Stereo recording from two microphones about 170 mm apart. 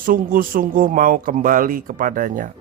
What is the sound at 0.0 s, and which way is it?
A man's voice, 55° right (ahead or behind).